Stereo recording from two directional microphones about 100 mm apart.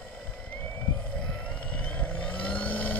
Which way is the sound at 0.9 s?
20° left (ahead or behind).